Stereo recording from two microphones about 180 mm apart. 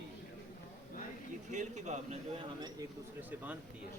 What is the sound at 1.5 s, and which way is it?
Speech, 40° right (ahead or behind).